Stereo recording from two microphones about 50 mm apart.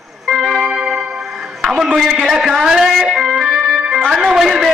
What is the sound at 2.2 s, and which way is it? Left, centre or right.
Speech, centre.